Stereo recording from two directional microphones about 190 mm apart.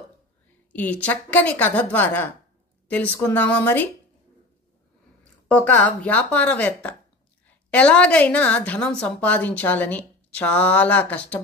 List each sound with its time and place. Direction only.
0.7 s a woman's voice: 10° left (ahead or behind)
5.5 s a woman's voice: 5° left (ahead or behind)